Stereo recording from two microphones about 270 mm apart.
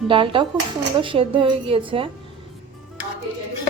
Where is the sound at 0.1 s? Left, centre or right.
Centre.